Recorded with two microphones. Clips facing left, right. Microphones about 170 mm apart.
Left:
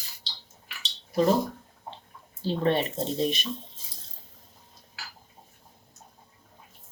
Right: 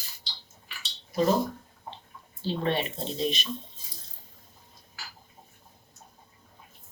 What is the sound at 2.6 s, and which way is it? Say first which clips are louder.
Speech: left 5 dB; 45° left (ahead or behind).